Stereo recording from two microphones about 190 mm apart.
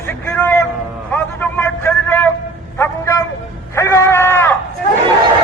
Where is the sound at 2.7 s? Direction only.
15° left (ahead or behind).